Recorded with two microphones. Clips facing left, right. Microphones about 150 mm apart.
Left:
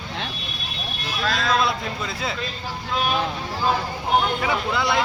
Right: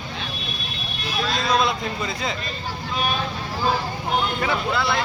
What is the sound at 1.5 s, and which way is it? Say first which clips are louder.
Speech: right 2 dB; 5° left (ahead or behind).